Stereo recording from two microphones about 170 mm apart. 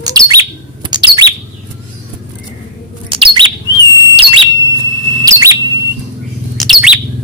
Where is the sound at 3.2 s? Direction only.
30° right (ahead or behind).